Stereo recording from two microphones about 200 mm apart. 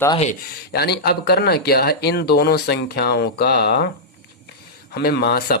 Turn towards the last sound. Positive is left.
turn(degrees=50)  # may be behind; listen again after turning